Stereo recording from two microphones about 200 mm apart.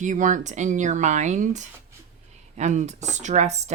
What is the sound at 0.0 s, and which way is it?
Speech, 40° right (ahead or behind).